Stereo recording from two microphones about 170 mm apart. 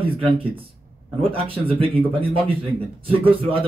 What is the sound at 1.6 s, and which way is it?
Speech, 35° right (ahead or behind).